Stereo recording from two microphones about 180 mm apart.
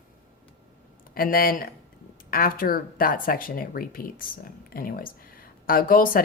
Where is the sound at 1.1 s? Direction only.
55° left (ahead or behind).